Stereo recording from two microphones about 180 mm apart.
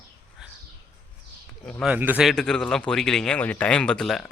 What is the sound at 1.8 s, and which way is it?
Speech, 10° right (ahead or behind).